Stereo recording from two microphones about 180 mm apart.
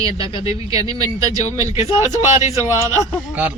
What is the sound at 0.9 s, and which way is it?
Speech, 20° right (ahead or behind).